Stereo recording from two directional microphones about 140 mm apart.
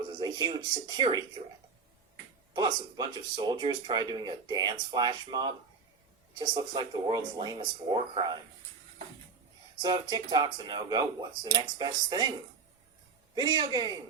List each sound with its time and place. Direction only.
0.2 s speech: 30° right (ahead or behind)
2.5 s speech: 35° right (ahead or behind)
9.8 s speech: 30° right (ahead or behind)
13.3 s speech: 35° right (ahead or behind)